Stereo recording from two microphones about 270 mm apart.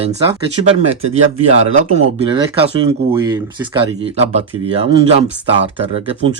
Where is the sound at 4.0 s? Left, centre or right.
Right.